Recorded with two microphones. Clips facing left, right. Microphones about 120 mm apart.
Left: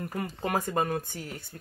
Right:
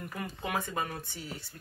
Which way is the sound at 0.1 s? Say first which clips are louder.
Left 4 dB; 40° left (ahead or behind).